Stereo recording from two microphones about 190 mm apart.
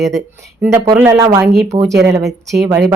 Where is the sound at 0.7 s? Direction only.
10° right (ahead or behind).